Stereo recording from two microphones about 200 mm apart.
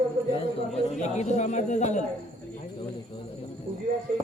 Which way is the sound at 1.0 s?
35° left (ahead or behind).